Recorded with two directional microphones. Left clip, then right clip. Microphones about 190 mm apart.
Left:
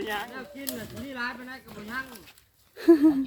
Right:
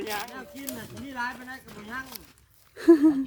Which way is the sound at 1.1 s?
30° right (ahead or behind).